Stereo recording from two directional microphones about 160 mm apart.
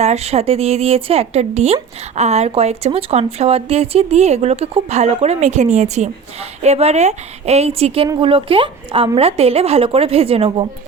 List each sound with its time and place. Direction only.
0.0 s speech: 40° right (ahead or behind)